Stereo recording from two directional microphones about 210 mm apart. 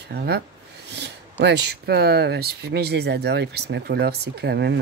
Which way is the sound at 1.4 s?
55° right (ahead or behind).